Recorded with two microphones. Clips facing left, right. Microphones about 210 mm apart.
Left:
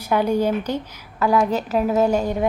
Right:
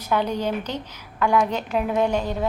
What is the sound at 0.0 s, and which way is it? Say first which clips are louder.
A woman's voice: left 4 dB; 10° left (ahead or behind).